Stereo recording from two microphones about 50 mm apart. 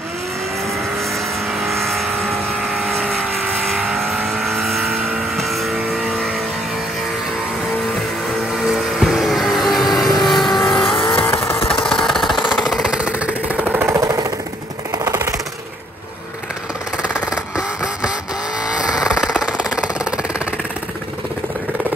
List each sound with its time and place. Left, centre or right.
1.5 s vehicle: centre
8.6 s vehicle: centre
10.8 s vehicle: left
11.9 s jackhammer: centre
12.5 s jackhammer: centre
13.0 s jackhammer: right
13.8 s engine: right
15.0 s jackhammer: right
18.7 s vehicle: centre